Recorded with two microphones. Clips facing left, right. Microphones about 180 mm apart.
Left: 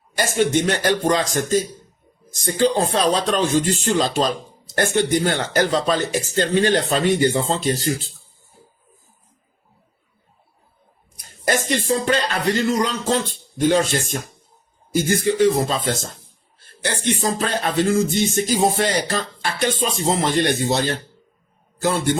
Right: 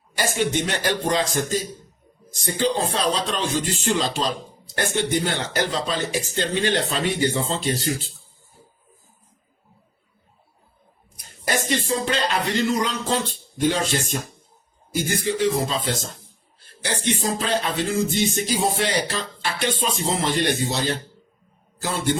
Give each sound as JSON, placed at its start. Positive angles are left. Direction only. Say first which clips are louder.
{"t": 0.2, "sound": "speech", "louder": "left 4 dB", "side_deg": 50}
{"t": 11.4, "sound": "speech", "louder": "left 3 dB", "side_deg": 50}
{"t": 15.1, "sound": "a man's voice", "louder": "left 5 dB", "side_deg": 50}